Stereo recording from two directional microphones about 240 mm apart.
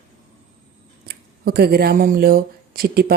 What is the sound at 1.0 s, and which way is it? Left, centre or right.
Speech, right.